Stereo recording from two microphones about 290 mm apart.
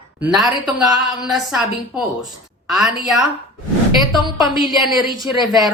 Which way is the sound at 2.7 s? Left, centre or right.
Centre.